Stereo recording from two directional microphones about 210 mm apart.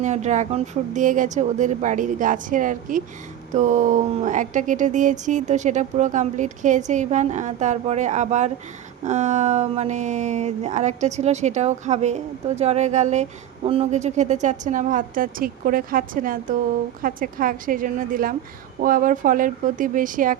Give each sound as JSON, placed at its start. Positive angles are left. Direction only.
{"t": 0.0, "sound": "speech", "side_deg": -35}